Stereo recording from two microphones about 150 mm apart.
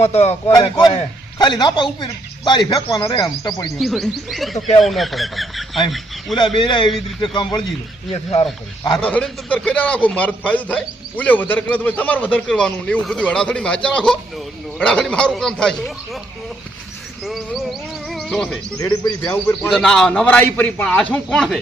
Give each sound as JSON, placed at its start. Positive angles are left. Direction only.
{"t": 0.0, "sound": "speech", "side_deg": 45}
{"t": 0.4, "sound": "speech", "side_deg": 25}
{"t": 3.8, "sound": "music", "side_deg": 0}
{"t": 4.8, "sound": "speech", "side_deg": 0}
{"t": 6.6, "sound": "a man's voice", "side_deg": 30}
{"t": 8.1, "sound": "speech", "side_deg": 45}
{"t": 9.0, "sound": "a man's voice", "side_deg": 10}
{"t": 17.2, "sound": "music", "side_deg": 0}
{"t": 18.8, "sound": "speech", "side_deg": 25}
{"t": 19.2, "sound": "a man's voice", "side_deg": 15}
{"t": 19.7, "sound": "a man's voice", "side_deg": 5}